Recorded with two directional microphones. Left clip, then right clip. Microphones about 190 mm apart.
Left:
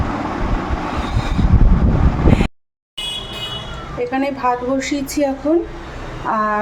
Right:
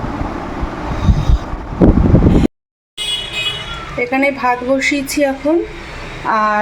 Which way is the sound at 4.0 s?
Centre (ahead or behind).